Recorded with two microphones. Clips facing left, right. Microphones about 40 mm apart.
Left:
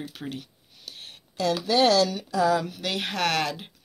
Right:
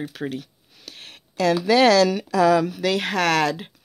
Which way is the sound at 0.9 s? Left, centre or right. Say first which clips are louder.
Right 3 dB; right.